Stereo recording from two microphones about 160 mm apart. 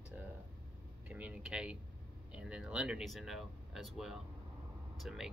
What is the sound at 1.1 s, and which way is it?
Speech, 10° right (ahead or behind).